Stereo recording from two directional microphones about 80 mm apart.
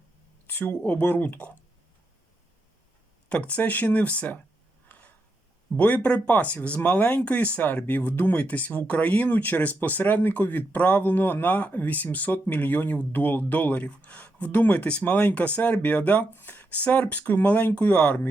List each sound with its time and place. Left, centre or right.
0.4 s speech: left
3.2 s speech: centre
4.9 s a sound: left
5.7 s speech: centre